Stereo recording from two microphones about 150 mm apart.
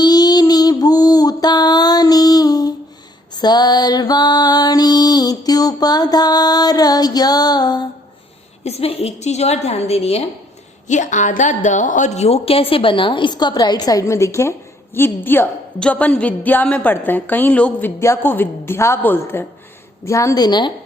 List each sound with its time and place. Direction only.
0.0 s a sound: 25° left (ahead or behind)
3.3 s mantra: 25° left (ahead or behind)
8.6 s a woman's voice: 45° left (ahead or behind)
10.8 s a woman's voice: 55° left (ahead or behind); by 20.7 s 30° left (ahead or behind)